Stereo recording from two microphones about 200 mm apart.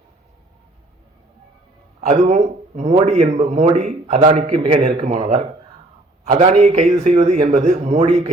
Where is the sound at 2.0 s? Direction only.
35° right (ahead or behind).